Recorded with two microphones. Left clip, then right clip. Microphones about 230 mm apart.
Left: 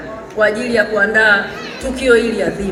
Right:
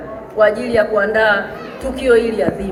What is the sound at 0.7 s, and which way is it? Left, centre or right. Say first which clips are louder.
A woman's voice: left 1 dB; left.